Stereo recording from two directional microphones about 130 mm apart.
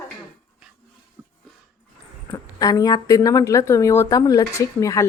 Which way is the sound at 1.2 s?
15° right (ahead or behind).